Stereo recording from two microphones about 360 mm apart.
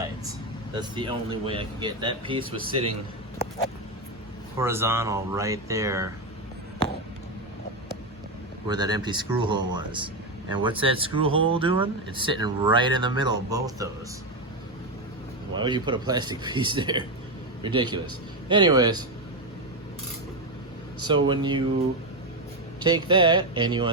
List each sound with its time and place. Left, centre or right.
0.8 s speech: centre
4.5 s speech: centre
8.6 s speech: centre
15.5 s speech: centre
21.1 s speech: centre
22.8 s speech: centre